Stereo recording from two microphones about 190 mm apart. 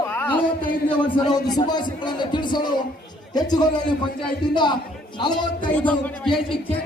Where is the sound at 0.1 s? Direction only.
10° left (ahead or behind).